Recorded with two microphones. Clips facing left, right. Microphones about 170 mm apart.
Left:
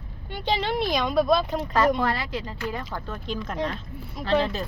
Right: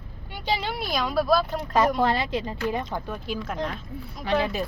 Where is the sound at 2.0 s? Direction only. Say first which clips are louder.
Right 3 dB; 20° right (ahead or behind).